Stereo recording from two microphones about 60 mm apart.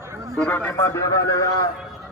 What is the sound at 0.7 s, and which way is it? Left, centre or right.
Speech, left.